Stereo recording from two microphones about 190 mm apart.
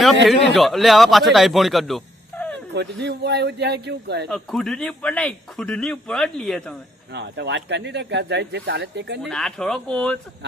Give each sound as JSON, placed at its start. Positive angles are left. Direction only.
{"t": 0.3, "sound": "a man's voice", "side_deg": 0}
{"t": 2.3, "sound": "a sound", "side_deg": 10}
{"t": 2.7, "sound": "speech", "side_deg": -60}
{"t": 4.3, "sound": "a man's voice", "side_deg": 0}
{"t": 7.1, "sound": "speech", "side_deg": -65}
{"t": 9.2, "sound": "a man's voice", "side_deg": 5}